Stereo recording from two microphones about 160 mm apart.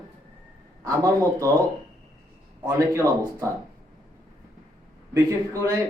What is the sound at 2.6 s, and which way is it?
Speech, 20° right (ahead or behind).